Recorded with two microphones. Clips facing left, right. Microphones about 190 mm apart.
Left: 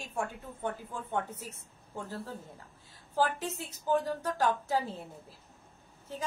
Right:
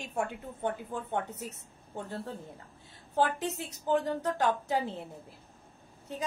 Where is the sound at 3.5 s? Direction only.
20° right (ahead or behind).